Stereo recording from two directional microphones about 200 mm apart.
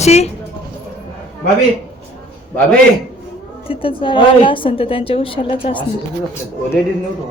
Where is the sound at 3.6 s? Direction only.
25° left (ahead or behind).